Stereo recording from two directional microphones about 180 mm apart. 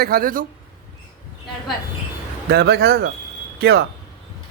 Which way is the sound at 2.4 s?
65° right (ahead or behind).